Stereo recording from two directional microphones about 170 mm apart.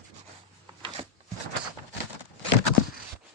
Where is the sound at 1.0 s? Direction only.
40° right (ahead or behind).